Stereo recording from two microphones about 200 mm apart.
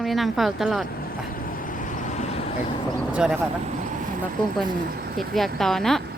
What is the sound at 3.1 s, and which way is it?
Speech, 5° right (ahead or behind).